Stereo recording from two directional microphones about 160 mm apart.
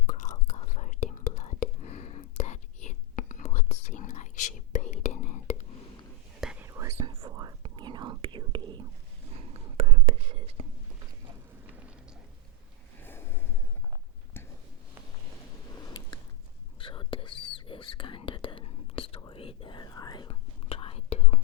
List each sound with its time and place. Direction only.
0.1 s whispering: 50° left (ahead or behind)
6.4 s whispering: 5° right (ahead or behind)
6.7 s whispering: 20° right (ahead or behind); by 10.7 s 35° right (ahead or behind)
13.0 s snort: 15° left (ahead or behind)
15.7 s a sound: 25° left (ahead or behind)
16.8 s whispering: 30° left (ahead or behind)